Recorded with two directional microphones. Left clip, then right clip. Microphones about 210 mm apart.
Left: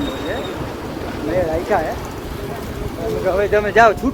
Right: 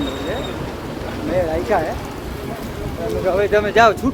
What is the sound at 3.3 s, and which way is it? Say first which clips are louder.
Speech: even; 10° right (ahead or behind).